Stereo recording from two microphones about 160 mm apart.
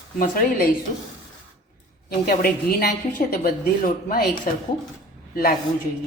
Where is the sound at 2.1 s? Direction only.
65° left (ahead or behind).